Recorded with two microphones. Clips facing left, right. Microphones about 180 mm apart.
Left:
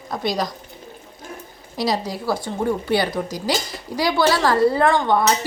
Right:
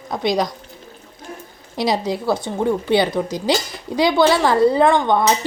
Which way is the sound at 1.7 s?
25° right (ahead or behind).